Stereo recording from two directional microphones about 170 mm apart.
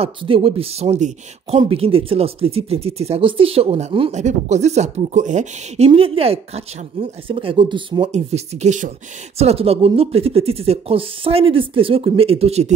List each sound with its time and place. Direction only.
0.0 s speech: 30° right (ahead or behind)
5.9 s speech: 35° right (ahead or behind)
8.1 s speech: 40° right (ahead or behind)